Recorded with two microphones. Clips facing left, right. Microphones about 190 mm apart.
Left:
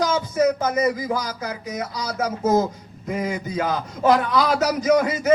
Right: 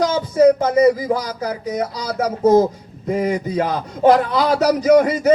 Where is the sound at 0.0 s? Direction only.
30° right (ahead or behind).